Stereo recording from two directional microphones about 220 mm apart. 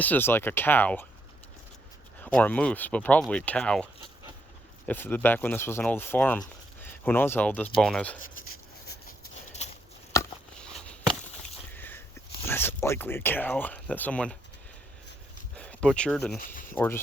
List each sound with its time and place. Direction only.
0.0 s speech: 10° left (ahead or behind)
2.2 s speech: 5° left (ahead or behind)
4.9 s speech: 10° left (ahead or behind)
8.9 s a sound: 35° left (ahead or behind)
10.6 s walk: 5° left (ahead or behind)
11.7 s speech: 10° left (ahead or behind)
15.5 s speech: 5° left (ahead or behind)